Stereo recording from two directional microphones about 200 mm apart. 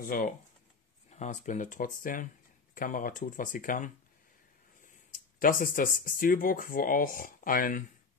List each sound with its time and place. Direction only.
0.0 s speech: 45° left (ahead or behind)